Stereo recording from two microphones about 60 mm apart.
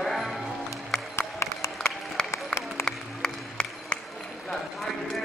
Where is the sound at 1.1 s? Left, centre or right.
Left.